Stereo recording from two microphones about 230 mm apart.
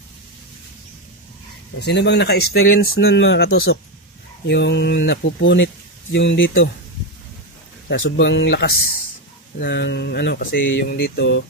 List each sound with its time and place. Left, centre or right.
1.8 s speech: left
7.9 s speech: left